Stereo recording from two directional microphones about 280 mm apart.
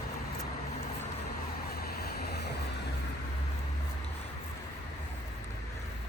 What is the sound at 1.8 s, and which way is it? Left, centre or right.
Vehicle, left.